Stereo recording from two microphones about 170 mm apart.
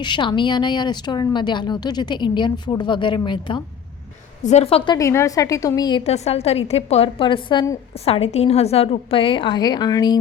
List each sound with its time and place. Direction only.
0.0 s a woman's voice: 25° left (ahead or behind)
4.9 s speech: 20° left (ahead or behind)
6.1 s a woman's voice: 40° left (ahead or behind)
8.0 s a woman's voice: 35° left (ahead or behind)